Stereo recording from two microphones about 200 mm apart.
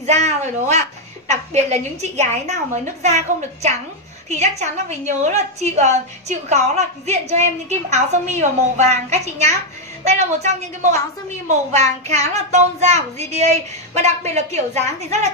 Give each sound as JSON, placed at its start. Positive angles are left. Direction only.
{"t": 0.0, "sound": "a woman's voice", "side_deg": -35}